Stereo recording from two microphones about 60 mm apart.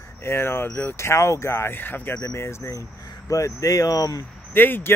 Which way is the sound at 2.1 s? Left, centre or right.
Left.